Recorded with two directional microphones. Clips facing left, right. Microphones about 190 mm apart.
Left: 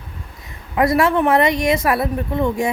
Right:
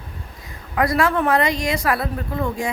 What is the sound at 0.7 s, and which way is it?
Female singing, 25° left (ahead or behind).